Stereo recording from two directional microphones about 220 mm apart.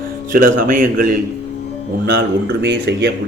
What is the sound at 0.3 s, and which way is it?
A man's voice, 40° right (ahead or behind).